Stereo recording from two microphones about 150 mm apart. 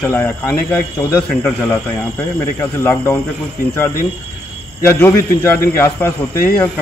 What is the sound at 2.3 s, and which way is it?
Speech, 20° left (ahead or behind).